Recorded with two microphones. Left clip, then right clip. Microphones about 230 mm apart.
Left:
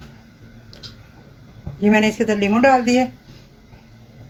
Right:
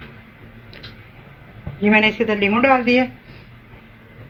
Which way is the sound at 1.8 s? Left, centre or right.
Left.